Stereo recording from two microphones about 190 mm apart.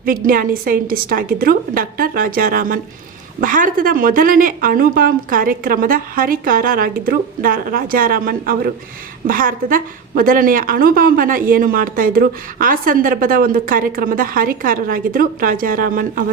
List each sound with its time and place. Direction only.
0.0 s a woman's voice: 50° right (ahead or behind)